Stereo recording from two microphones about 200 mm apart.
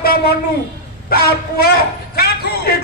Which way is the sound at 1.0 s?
50° left (ahead or behind).